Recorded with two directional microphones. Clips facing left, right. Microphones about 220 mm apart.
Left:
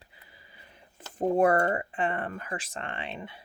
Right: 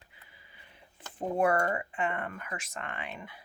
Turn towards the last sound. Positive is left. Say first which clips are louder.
# left 3 dB
turn(degrees=30)  # may be behind; listen again after turning